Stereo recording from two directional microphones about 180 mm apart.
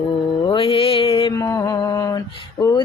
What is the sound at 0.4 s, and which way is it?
Mantra, 30° left (ahead or behind).